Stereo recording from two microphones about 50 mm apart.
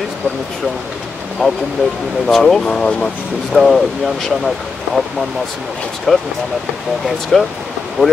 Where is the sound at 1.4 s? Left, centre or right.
Centre.